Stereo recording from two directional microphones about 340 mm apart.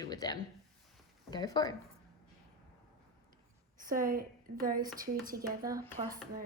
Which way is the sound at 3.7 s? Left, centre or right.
Right.